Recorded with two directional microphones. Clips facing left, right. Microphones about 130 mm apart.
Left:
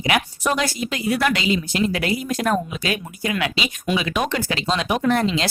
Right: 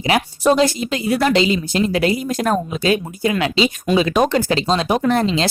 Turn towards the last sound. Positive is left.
turn(degrees=-30)  # may be behind; listen again after turning